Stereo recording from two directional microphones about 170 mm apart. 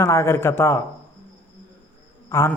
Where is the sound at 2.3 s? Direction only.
15° left (ahead or behind).